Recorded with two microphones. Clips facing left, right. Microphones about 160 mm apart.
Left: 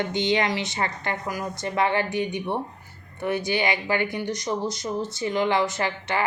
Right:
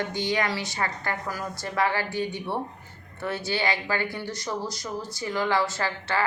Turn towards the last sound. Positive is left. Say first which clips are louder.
# left 2 dB
turn(degrees=20)  # may be behind; listen again after turning